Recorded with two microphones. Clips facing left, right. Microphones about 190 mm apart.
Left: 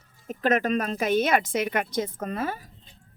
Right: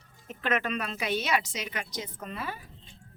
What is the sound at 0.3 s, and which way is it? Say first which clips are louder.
A woman's voice: left 7 dB; 40° left (ahead or behind).